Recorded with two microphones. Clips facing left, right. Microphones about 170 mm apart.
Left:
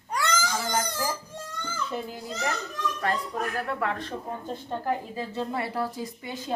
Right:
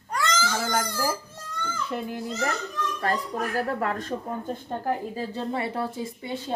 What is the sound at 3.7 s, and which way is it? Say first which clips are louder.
Speech: right 2 dB; 40° right (ahead or behind).